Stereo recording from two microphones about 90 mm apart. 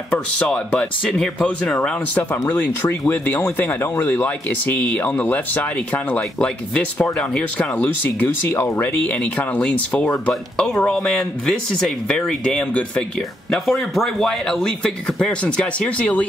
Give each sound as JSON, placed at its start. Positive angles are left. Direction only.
{"t": 0.1, "sound": "speech", "side_deg": 10}
{"t": 13.5, "sound": "speech", "side_deg": 0}